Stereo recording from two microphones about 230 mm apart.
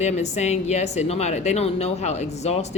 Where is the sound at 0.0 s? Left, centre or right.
Left.